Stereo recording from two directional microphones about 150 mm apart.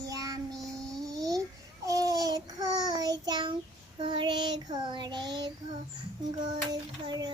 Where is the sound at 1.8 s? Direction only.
25° right (ahead or behind).